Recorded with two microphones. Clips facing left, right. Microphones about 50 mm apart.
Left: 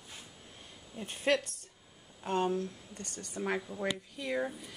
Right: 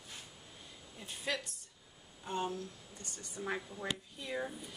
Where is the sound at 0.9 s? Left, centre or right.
Left.